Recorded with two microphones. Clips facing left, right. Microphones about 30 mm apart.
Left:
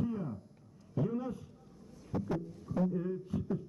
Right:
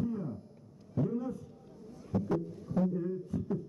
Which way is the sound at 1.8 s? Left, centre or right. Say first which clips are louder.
Right 3 dB; centre.